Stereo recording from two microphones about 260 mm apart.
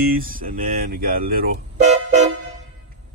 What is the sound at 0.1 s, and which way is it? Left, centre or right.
Speech, right.